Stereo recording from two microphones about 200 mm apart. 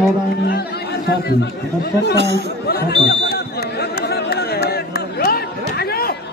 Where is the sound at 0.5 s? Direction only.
55° left (ahead or behind).